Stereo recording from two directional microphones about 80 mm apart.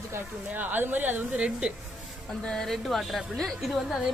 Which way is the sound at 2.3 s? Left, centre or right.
Centre.